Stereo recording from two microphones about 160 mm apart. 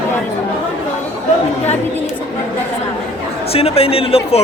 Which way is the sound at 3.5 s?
35° left (ahead or behind).